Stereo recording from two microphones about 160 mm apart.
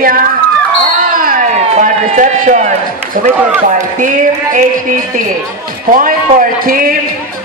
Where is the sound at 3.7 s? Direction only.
55° right (ahead or behind).